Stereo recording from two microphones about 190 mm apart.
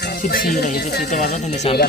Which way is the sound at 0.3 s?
50° left (ahead or behind).